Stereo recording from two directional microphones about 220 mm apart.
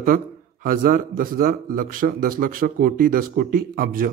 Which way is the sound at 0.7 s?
40° right (ahead or behind).